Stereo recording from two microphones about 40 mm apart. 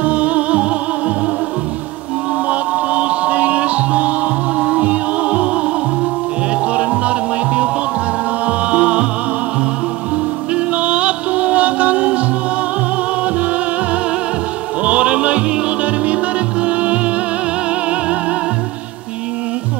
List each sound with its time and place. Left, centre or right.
0.0 s music: right
2.5 s music: right
6.7 s music: right
10.5 s music: right
14.8 s music: right